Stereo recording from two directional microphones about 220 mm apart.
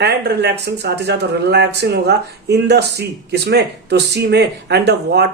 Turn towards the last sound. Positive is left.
turn(degrees=-50)  # may be behind; listen again after turning